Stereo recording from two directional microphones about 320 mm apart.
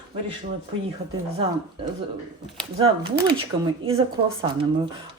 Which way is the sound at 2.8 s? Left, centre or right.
Centre.